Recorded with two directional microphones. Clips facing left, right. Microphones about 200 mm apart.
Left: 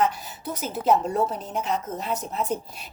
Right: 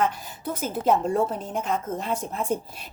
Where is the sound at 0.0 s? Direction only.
50° right (ahead or behind).